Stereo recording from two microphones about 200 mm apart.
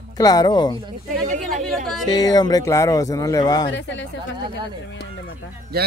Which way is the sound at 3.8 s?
65° left (ahead or behind).